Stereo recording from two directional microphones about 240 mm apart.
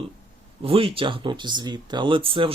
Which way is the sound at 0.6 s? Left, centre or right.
Right.